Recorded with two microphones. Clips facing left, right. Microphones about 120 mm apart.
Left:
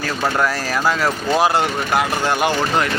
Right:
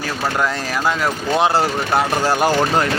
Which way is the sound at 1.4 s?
25° right (ahead or behind).